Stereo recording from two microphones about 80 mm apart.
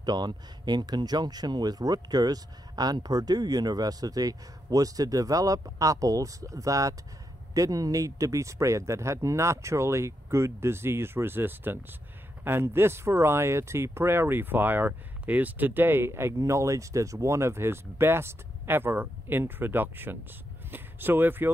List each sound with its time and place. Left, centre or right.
0.0 s speech: right